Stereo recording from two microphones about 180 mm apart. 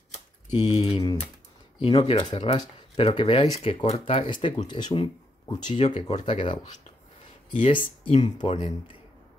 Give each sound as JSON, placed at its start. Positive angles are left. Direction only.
{"t": 0.5, "sound": "mantra", "side_deg": 25}
{"t": 0.8, "sound": "speech", "side_deg": 25}
{"t": 7.5, "sound": "speech", "side_deg": 30}